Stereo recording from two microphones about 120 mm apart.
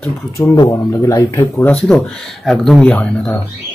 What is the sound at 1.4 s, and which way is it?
Speech, 15° left (ahead or behind).